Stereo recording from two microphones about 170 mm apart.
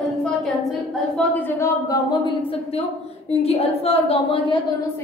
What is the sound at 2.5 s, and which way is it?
A woman's voice, 35° left (ahead or behind).